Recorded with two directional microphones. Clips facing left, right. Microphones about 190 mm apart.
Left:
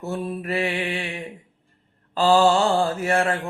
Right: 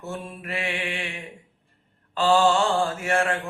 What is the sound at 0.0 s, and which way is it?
Mantra, 35° left (ahead or behind).